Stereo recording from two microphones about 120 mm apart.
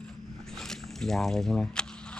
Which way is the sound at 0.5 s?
5° left (ahead or behind).